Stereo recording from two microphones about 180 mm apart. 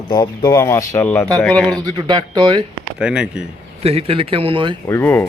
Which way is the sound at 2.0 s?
25° right (ahead or behind).